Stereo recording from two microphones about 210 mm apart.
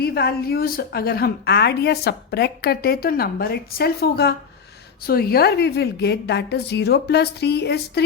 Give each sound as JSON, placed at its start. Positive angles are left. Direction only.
{"t": 0.0, "sound": "a woman's voice", "side_deg": 50}